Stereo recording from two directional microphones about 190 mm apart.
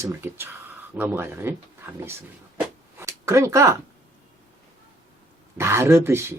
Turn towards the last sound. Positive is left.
turn(degrees=-15)  # may be behind; listen again after turning